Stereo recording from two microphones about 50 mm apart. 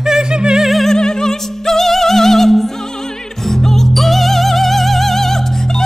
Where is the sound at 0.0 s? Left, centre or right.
Centre.